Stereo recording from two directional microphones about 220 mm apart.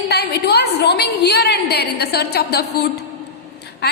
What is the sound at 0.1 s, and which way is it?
A woman's voice, 45° left (ahead or behind).